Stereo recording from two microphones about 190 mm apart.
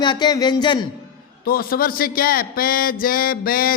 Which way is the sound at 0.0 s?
25° left (ahead or behind).